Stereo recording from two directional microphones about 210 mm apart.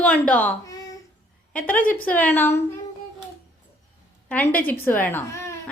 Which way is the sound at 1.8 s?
40° left (ahead or behind).